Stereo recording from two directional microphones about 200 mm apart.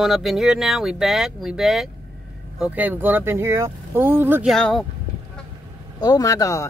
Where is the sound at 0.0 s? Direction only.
Centre (ahead or behind).